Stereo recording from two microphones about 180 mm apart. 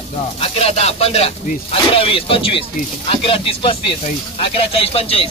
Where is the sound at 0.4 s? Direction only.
35° left (ahead or behind).